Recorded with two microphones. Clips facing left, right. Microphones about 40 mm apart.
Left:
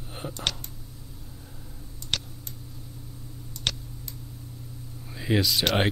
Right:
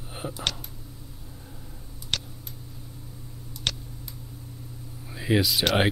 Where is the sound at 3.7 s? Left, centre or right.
Centre.